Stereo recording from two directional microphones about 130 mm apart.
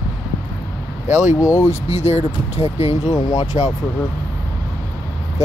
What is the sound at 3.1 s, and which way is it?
Speech, 30° left (ahead or behind).